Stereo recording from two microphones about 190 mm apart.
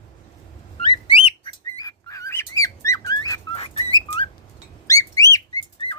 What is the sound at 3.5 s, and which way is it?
Bird, 30° left (ahead or behind).